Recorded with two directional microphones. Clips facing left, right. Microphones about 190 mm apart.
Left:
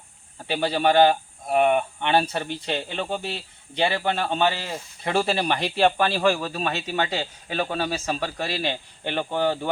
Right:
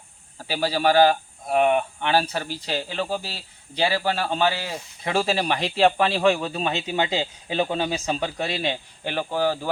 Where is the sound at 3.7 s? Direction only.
5° right (ahead or behind).